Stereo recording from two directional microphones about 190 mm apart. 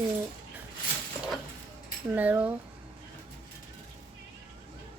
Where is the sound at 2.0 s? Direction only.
10° right (ahead or behind).